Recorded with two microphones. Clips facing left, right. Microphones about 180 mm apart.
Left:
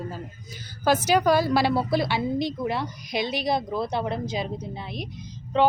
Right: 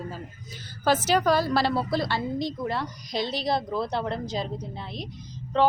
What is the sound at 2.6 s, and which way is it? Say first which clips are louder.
A woman's voice: left 2 dB; 20° left (ahead or behind).